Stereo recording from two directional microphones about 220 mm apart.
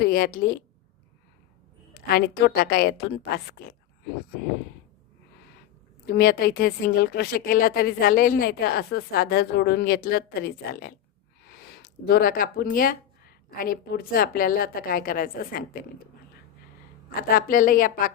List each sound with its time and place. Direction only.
0.0 s a woman's voice: 45° left (ahead or behind)
1.9 s a woman's voice: 45° left (ahead or behind)
6.1 s a woman's voice: 45° left (ahead or behind)
17.2 s a woman's voice: 40° left (ahead or behind)